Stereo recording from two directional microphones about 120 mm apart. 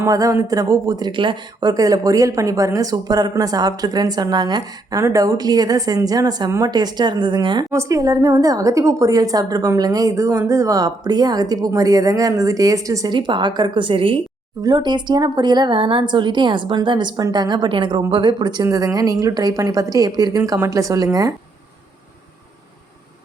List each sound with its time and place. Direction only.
0.0 s a woman's voice: 30° right (ahead or behind)
1.7 s a woman's voice: 30° right (ahead or behind)
7.7 s a woman's voice: 25° right (ahead or behind); by 14.2 s 45° right (ahead or behind)
14.6 s a woman's voice: 35° right (ahead or behind)